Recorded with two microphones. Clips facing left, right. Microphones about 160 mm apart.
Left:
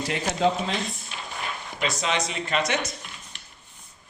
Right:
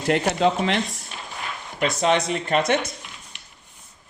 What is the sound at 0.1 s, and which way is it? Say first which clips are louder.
Speech: right 5 dB; 65° right (ahead or behind).